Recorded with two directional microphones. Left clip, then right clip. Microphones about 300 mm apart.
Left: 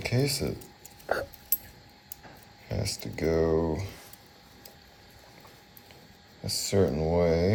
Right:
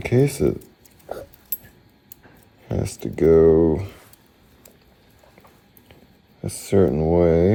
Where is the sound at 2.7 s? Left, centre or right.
Right.